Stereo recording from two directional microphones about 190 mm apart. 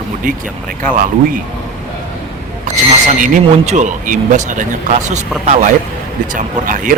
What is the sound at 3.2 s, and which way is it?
Speech, 40° right (ahead or behind).